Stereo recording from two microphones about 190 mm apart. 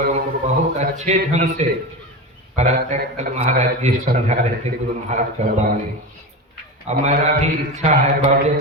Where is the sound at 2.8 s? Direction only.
35° right (ahead or behind).